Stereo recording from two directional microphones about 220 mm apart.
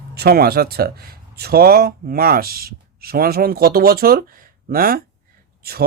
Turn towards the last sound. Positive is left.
turn(degrees=-45)  # may be behind; listen again after turning